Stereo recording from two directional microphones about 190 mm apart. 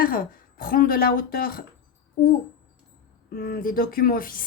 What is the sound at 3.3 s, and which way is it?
A woman's voice, 55° left (ahead or behind).